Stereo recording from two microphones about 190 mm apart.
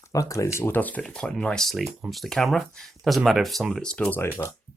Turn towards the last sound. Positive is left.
turn(degrees=5)  # may be behind; listen again after turning